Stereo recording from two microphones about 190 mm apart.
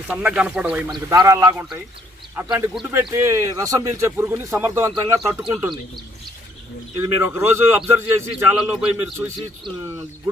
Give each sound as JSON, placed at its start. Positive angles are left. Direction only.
{"t": 0.1, "sound": "speech", "side_deg": -5}
{"t": 0.9, "sound": "speech", "side_deg": -20}
{"t": 7.0, "sound": "a man's voice", "side_deg": -15}